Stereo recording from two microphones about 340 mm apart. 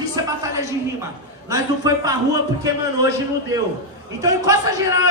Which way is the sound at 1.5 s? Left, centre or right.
Centre.